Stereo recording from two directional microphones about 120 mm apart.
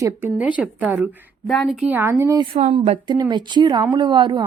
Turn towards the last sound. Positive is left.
turn(degrees=-40)  # may be behind; listen again after turning